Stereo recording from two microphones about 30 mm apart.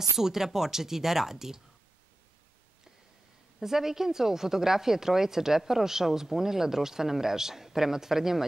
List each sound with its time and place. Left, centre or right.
0.2 s speech: centre
3.6 s speech: centre